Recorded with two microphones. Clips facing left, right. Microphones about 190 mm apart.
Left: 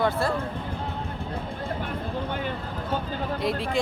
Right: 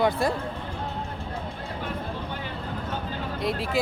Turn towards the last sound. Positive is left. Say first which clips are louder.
# left 1 dB
turn(degrees=0)  # may be behind; listen again after turning